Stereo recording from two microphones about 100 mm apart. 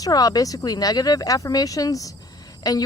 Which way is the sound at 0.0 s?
40° left (ahead or behind).